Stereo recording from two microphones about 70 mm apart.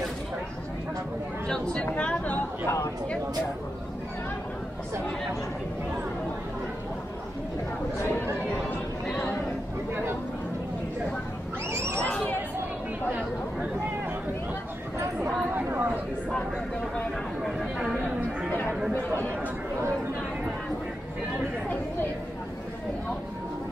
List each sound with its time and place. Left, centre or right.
1.5 s speech: centre
2.0 s a sound: centre
2.6 s speech: left
9.0 s a sound: centre
15.5 s chatter: right
17.4 s chatter: centre